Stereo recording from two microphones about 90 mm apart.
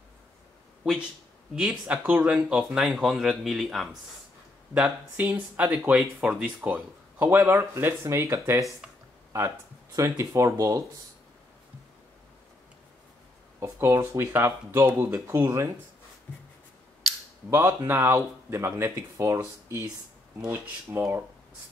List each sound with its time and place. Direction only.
0.8 s speech: 10° right (ahead or behind)
5.1 s speech: 20° right (ahead or behind)
9.9 s speech: 35° right (ahead or behind)
13.6 s speech: 30° right (ahead or behind)
15.3 s speech: 30° right (ahead or behind)
17.5 s speech: 25° right (ahead or behind)
20.5 s speech: 20° right (ahead or behind)